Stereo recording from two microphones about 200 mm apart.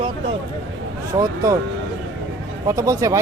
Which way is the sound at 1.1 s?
20° right (ahead or behind).